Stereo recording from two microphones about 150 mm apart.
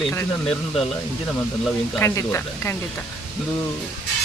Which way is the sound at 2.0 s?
15° left (ahead or behind).